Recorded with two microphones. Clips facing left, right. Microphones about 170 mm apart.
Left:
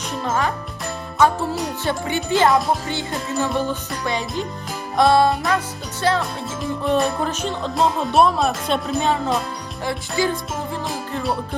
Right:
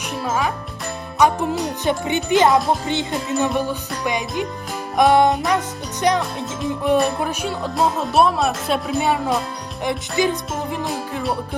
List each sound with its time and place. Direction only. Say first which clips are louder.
0.3 s music: even; 5° right (ahead or behind)
1.2 s music: right 1 dB; 15° right (ahead or behind)
10.8 s music: right 1 dB; centre (ahead or behind)